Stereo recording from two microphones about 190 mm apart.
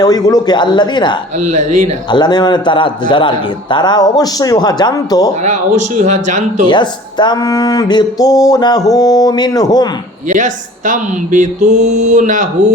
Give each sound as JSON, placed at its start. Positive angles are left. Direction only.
{"t": 0.0, "sound": "speech", "side_deg": 20}
{"t": 1.4, "sound": "speech", "side_deg": -40}
{"t": 2.0, "sound": "speech", "side_deg": 20}
{"t": 5.3, "sound": "speech", "side_deg": -40}
{"t": 6.7, "sound": "speech", "side_deg": 25}
{"t": 10.2, "sound": "speech", "side_deg": -40}